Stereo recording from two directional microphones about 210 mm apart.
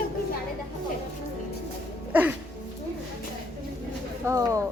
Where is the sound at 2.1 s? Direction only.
10° right (ahead or behind).